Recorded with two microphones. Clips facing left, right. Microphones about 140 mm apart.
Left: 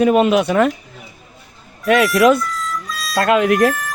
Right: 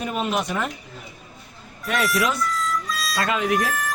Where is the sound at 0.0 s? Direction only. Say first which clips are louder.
Left 12 dB; 85° left.